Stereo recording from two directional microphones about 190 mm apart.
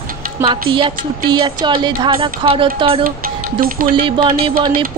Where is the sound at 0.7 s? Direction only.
25° right (ahead or behind).